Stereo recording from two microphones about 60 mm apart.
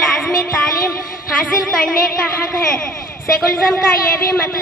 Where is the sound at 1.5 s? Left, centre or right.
Centre.